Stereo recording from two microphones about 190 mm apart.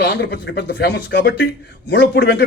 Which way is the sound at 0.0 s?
65° left (ahead or behind).